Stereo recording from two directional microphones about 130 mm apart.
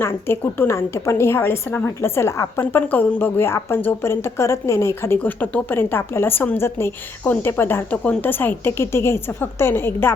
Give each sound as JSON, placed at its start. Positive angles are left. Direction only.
{"t": 0.0, "sound": "a woman's voice", "side_deg": 20}